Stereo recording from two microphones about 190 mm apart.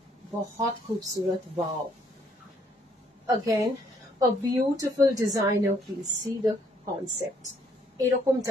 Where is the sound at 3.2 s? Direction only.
15° right (ahead or behind).